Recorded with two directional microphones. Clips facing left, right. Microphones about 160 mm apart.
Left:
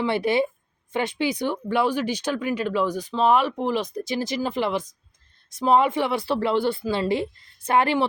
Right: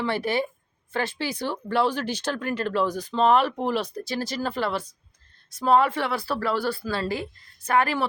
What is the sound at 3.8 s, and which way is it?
A woman's voice, 20° left (ahead or behind).